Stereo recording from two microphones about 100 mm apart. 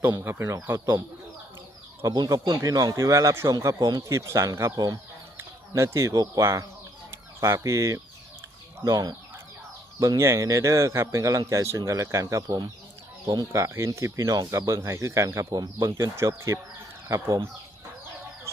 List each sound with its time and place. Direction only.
0.0 s speech: 25° right (ahead or behind)
2.1 s speech: 45° right (ahead or behind); by 4.7 s 30° right (ahead or behind)
5.7 s speech: 30° right (ahead or behind)
10.2 s speech: 30° right (ahead or behind)
18.5 s a sound: 25° right (ahead or behind)